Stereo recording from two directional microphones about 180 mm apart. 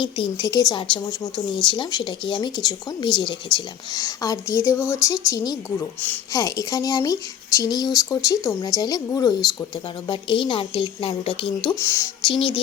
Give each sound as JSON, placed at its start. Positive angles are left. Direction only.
{"t": 0.0, "sound": "speech", "side_deg": 25}
{"t": 11.8, "sound": "speech", "side_deg": 15}
{"t": 12.2, "sound": "speech", "side_deg": 25}